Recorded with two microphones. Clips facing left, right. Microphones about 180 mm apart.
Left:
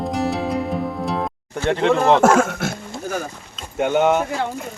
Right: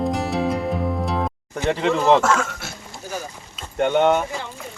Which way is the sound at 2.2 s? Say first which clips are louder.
Left 7 dB; 55° left (ahead or behind).